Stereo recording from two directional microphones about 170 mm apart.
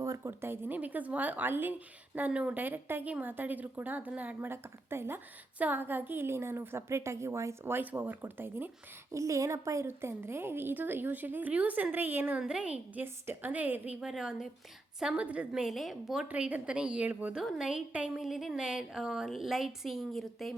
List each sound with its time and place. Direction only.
0.0 s a woman's voice: 15° right (ahead or behind); by 20.6 s centre (ahead or behind)